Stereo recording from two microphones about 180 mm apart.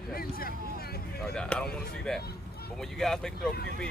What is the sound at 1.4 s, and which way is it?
Speech, 5° left (ahead or behind).